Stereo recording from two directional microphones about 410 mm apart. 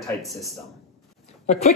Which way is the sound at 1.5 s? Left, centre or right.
Centre.